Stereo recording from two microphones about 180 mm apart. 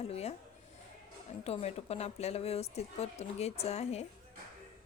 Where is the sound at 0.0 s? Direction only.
35° left (ahead or behind).